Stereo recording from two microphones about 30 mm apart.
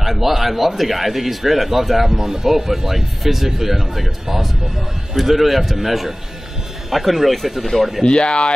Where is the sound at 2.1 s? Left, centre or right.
Centre.